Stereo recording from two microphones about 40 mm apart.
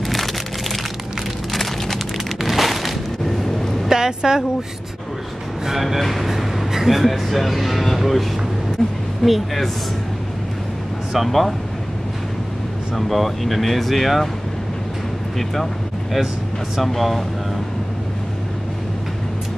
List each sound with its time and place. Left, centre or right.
0.1 s a sound: centre
3.9 s a woman's voice: centre
5.7 s speech: centre
11.1 s speech: centre
12.9 s speech: centre
15.3 s speech: centre